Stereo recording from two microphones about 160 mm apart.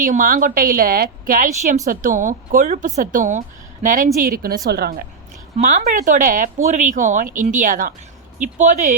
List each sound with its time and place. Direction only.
0.0 s a woman's voice: 60° right (ahead or behind)
4.7 s speech: 75° right (ahead or behind)
5.5 s speech: 50° right (ahead or behind)